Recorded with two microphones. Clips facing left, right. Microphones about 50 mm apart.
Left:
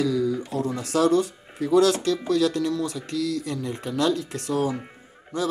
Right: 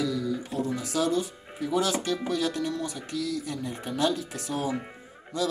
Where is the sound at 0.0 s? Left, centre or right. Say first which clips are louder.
Left 5 dB; left.